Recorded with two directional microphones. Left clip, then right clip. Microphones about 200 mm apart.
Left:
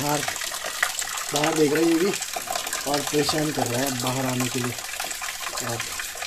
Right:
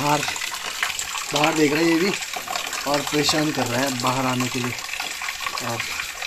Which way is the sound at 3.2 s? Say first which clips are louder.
Right 3 dB; 20° right (ahead or behind).